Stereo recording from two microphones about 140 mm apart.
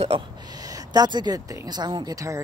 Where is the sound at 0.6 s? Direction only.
25° right (ahead or behind).